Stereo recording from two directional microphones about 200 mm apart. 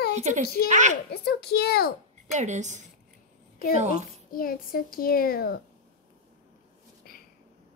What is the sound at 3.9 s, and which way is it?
A child's voice, 45° left (ahead or behind).